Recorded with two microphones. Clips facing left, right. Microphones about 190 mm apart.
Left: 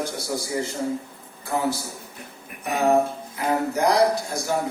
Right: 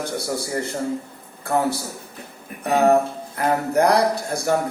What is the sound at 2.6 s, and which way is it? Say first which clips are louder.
Music: right 3 dB; 60° right (ahead or behind).